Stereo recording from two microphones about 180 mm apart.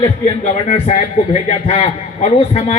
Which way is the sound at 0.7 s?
35° left (ahead or behind).